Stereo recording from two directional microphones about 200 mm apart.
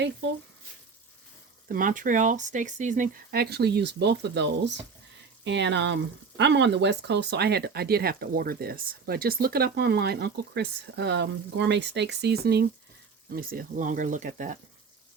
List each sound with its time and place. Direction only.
1.6 s speech: 45° right (ahead or behind)